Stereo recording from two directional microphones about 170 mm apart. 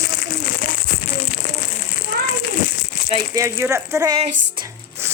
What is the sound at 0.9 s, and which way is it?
Music, 55° left (ahead or behind).